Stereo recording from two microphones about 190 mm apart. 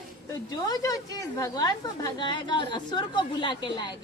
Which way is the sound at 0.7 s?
20° left (ahead or behind).